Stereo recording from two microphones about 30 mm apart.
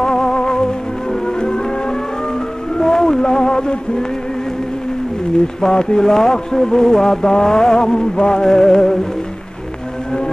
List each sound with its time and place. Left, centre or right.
0.0 s music: centre
2.8 s music: left
5.7 s mantra: left